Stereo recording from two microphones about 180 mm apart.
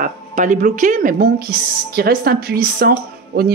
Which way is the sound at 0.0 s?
45° right (ahead or behind).